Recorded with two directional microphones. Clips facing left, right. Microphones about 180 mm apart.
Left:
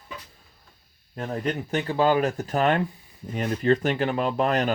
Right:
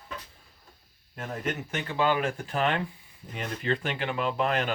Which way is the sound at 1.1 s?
35° left (ahead or behind).